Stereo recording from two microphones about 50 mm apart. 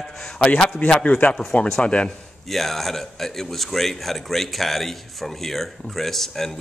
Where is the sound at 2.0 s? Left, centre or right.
Centre.